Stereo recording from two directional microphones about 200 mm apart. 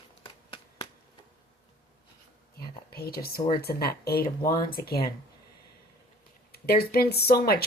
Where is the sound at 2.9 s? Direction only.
50° left (ahead or behind).